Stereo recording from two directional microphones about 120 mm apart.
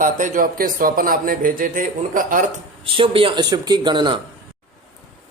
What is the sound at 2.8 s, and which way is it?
Speech, 50° right (ahead or behind).